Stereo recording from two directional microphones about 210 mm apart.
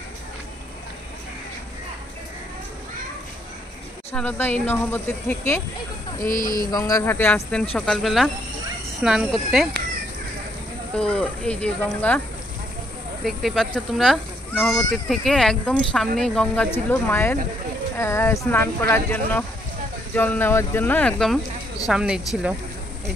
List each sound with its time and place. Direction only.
4.1 s speech: 5° left (ahead or behind)
6.2 s speech: 40° left (ahead or behind)
6.7 s speech: 15° left (ahead or behind); by 9.7 s centre (ahead or behind)
11.0 s speech: 5° left (ahead or behind)
13.2 s speech: centre (ahead or behind)